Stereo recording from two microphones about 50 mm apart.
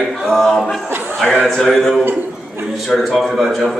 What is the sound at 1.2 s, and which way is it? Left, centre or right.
Speech, left.